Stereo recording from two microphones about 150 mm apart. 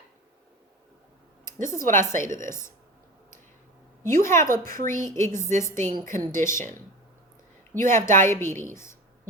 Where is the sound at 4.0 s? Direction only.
15° left (ahead or behind).